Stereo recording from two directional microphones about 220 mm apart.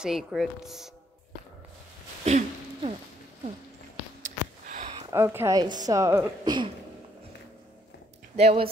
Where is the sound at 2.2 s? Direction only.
30° right (ahead or behind).